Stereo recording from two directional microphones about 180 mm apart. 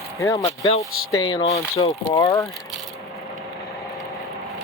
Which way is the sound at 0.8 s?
20° left (ahead or behind).